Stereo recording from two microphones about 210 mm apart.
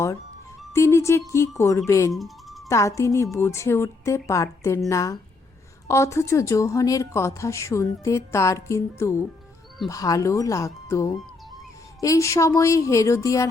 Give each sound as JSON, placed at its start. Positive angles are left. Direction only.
{"t": 0.7, "sound": "a woman's voice", "side_deg": 15}
{"t": 2.1, "sound": "music", "side_deg": 0}
{"t": 2.6, "sound": "a woman's voice", "side_deg": 15}